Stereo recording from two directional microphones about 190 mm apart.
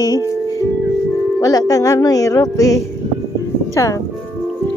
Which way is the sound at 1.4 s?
20° left (ahead or behind).